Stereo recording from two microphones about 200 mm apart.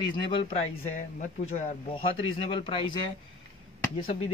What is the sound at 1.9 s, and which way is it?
Speech, 25° left (ahead or behind).